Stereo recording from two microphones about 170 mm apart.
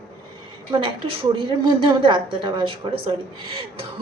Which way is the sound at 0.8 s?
30° right (ahead or behind).